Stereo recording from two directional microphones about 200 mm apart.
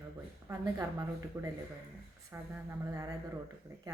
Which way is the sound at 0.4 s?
15° right (ahead or behind).